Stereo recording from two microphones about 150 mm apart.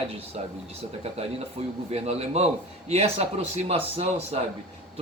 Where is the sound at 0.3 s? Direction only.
45° right (ahead or behind).